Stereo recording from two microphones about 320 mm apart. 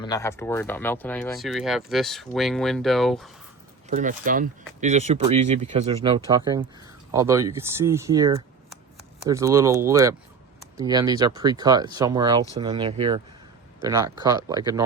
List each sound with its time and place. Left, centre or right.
0.0 s speech: centre
3.8 s speech: right